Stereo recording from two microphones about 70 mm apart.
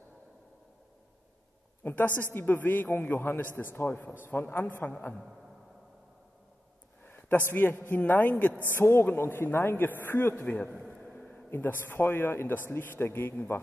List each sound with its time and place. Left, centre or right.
1.8 s a woman's voice: left
7.1 s a sound: left
7.5 s a man's voice: left
10.4 s a man's voice: left